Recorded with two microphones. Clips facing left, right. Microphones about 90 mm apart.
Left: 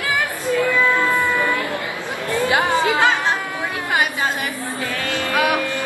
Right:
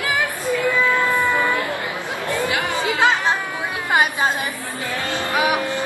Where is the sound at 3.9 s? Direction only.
20° right (ahead or behind).